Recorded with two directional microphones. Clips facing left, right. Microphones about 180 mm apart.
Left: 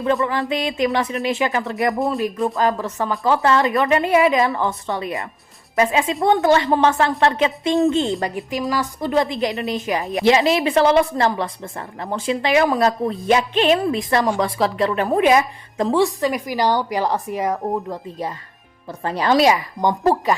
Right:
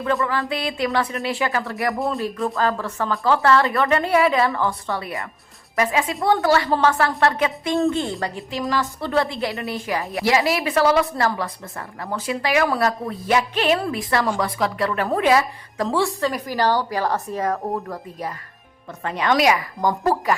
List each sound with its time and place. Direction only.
0.0 s a woman's voice: 20° left (ahead or behind)
18.9 s a woman's voice: 35° left (ahead or behind)